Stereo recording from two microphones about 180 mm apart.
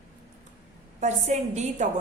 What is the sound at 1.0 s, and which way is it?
Speech, 40° right (ahead or behind).